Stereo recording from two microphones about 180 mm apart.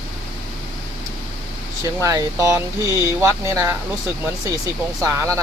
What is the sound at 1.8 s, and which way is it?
Speech, 20° right (ahead or behind).